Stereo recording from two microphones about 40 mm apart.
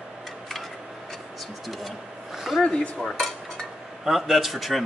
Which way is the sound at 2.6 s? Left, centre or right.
Left.